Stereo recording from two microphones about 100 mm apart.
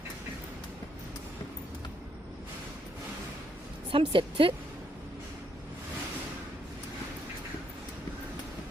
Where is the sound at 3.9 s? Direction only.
60° right (ahead or behind).